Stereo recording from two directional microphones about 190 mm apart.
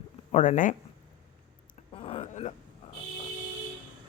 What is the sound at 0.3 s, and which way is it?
Speech, 40° left (ahead or behind).